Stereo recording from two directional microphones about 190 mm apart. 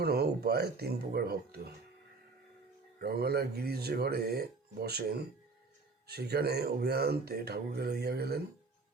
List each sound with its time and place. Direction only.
0.0 s speech: 55° right (ahead or behind)
3.0 s speech: 55° right (ahead or behind)